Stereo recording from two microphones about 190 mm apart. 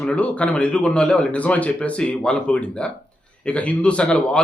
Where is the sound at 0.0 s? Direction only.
5° left (ahead or behind).